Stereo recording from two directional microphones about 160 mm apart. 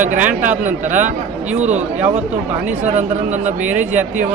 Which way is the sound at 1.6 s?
45° right (ahead or behind).